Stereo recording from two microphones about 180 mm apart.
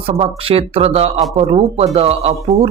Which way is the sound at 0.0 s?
30° right (ahead or behind).